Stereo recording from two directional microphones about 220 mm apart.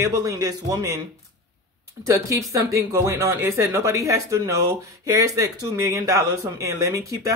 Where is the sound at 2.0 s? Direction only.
15° right (ahead or behind).